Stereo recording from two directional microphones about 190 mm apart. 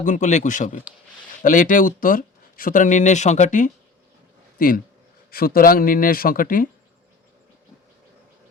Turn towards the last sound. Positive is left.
turn(degrees=45)  # may be behind; listen again after turning